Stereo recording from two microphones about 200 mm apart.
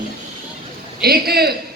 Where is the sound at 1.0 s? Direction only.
50° right (ahead or behind).